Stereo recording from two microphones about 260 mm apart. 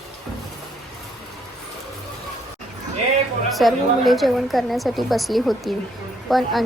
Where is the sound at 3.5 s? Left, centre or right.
Centre.